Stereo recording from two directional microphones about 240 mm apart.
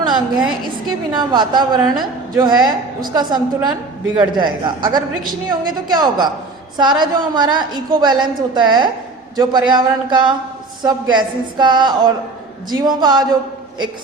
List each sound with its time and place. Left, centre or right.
1.1 s a woman's voice: centre